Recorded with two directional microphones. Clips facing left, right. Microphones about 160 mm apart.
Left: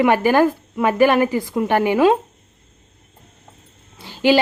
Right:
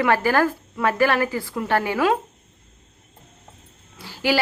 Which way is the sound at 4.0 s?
20° left (ahead or behind).